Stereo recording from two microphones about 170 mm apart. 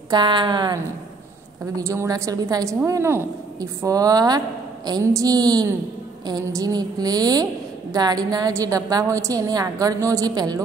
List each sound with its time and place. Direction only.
0.1 s a woman's voice: 25° right (ahead or behind)
1.8 s a woman's voice: 15° right (ahead or behind)